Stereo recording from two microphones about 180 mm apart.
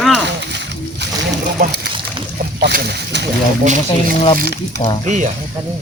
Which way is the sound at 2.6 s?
65° right (ahead or behind).